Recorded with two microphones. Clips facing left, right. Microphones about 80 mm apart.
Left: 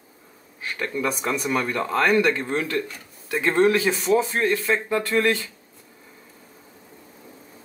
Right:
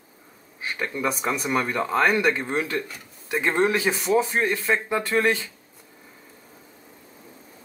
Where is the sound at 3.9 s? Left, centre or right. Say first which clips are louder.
Left 1 dB; centre.